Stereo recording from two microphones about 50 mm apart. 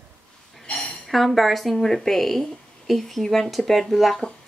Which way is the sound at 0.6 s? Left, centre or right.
Left.